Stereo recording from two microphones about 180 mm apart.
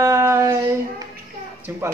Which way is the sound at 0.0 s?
15° right (ahead or behind).